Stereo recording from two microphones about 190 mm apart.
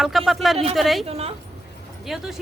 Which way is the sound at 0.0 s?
Centre (ahead or behind).